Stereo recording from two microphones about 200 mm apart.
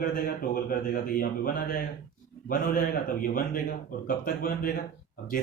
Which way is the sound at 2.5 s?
45° left (ahead or behind).